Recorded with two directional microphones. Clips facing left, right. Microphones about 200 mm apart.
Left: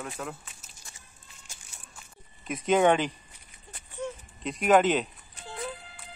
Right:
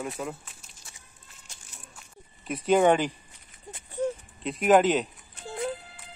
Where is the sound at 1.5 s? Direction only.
Centre (ahead or behind).